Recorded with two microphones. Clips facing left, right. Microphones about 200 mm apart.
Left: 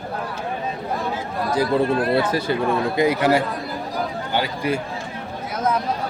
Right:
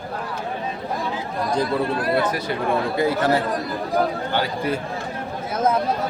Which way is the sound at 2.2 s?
30° left (ahead or behind).